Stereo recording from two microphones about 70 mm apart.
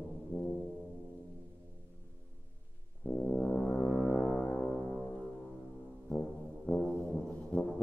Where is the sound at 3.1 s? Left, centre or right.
Centre.